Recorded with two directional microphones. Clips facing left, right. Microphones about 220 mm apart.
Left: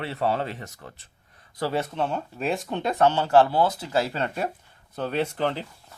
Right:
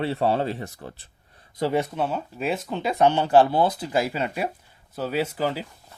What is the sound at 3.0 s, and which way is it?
Speech, 15° right (ahead or behind).